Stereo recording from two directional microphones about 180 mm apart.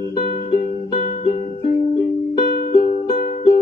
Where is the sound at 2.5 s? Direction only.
50° left (ahead or behind).